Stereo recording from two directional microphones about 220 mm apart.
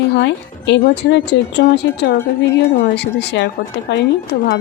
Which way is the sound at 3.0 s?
50° left (ahead or behind).